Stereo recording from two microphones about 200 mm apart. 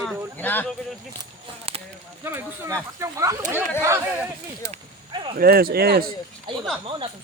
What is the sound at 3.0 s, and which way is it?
Speech, 15° right (ahead or behind).